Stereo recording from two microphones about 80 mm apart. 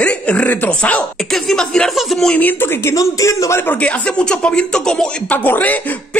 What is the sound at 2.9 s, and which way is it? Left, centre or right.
Speech, left.